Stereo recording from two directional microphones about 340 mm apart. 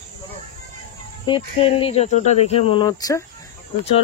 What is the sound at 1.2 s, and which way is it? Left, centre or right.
Speech, centre.